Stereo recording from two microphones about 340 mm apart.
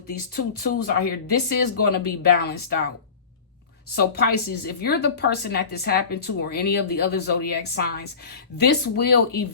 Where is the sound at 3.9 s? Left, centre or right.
Left.